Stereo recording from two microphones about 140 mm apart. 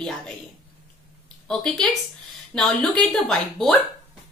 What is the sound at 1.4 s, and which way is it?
Speech, 5° left (ahead or behind).